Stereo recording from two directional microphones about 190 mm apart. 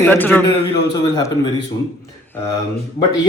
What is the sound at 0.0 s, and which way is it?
Speech, 10° left (ahead or behind).